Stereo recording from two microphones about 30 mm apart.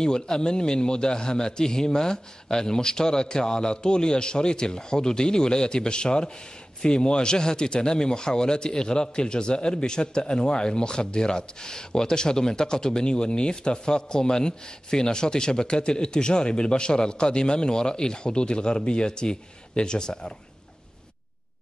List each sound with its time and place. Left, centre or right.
0.0 s speech: left